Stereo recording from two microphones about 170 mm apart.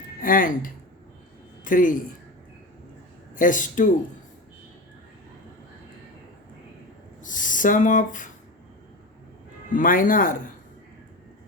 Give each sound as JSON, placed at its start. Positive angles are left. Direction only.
{"t": 0.2, "sound": "speech", "side_deg": 55}
{"t": 3.3, "sound": "speech", "side_deg": 50}
{"t": 7.2, "sound": "speech", "side_deg": 50}
{"t": 9.7, "sound": "speech", "side_deg": 50}